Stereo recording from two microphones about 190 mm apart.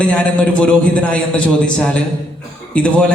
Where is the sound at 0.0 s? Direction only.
5° left (ahead or behind).